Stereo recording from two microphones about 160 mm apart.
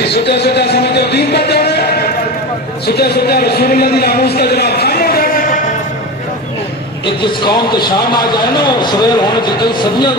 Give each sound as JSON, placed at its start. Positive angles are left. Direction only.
{"t": 0.0, "sound": "music", "side_deg": 90}
{"t": 2.8, "sound": "a sound", "side_deg": 90}
{"t": 7.0, "sound": "a man's voice", "side_deg": 30}